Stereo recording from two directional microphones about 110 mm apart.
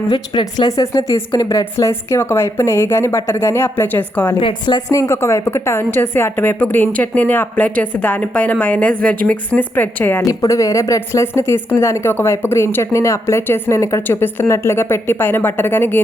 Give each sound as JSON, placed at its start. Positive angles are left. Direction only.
{"t": 0.6, "sound": "speech", "side_deg": 30}
{"t": 1.7, "sound": "speech", "side_deg": 25}
{"t": 4.4, "sound": "a woman's voice", "side_deg": 50}
{"t": 10.2, "sound": "speech", "side_deg": 30}